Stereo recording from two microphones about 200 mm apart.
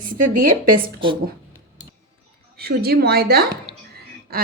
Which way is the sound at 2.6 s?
50° right (ahead or behind).